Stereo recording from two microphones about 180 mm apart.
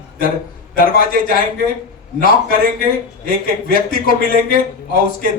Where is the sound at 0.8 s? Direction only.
55° left (ahead or behind).